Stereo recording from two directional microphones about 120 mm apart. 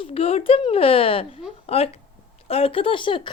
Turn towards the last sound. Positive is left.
turn(degrees=45)  # may be behind; listen again after turning